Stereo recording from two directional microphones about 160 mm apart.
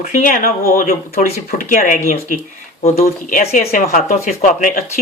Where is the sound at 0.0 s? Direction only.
55° left (ahead or behind).